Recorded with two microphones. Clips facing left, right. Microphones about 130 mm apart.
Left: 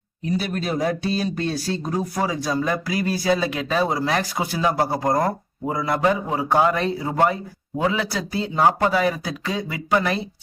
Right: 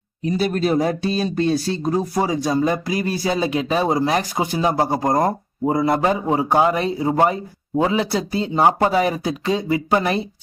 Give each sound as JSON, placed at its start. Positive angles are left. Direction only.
{"t": 0.5, "sound": "speech", "side_deg": -35}